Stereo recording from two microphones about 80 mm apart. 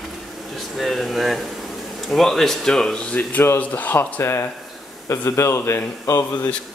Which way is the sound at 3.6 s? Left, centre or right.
Centre.